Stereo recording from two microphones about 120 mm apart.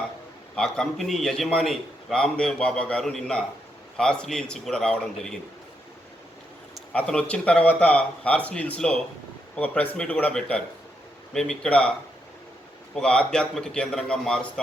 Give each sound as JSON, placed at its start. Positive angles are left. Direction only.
{"t": 0.5, "sound": "a man's voice", "side_deg": 5}
{"t": 6.9, "sound": "a man's voice", "side_deg": 10}